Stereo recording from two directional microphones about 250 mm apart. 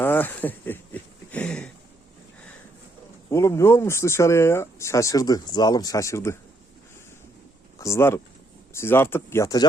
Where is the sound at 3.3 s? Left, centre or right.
Centre.